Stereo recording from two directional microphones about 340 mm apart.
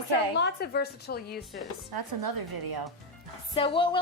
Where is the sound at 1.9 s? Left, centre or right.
Right.